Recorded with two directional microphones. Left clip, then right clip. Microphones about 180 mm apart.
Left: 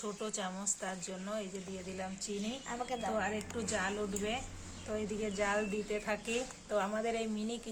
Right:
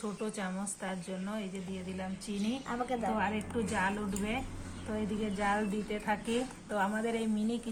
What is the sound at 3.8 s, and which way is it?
Speech, 25° left (ahead or behind).